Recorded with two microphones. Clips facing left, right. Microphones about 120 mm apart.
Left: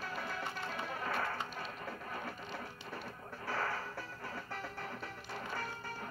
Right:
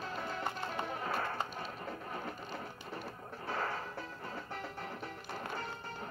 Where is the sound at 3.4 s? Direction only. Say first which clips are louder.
Even; 20° right (ahead or behind).